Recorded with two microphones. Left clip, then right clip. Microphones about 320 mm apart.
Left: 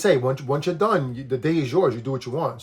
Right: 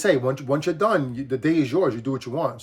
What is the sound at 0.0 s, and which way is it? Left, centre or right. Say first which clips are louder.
Speech: left 1 dB; centre.